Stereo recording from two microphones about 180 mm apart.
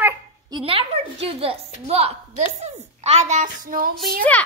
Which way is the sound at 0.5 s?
30° right (ahead or behind).